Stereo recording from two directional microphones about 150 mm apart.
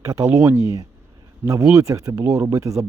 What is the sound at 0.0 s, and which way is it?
Speech, 20° right (ahead or behind).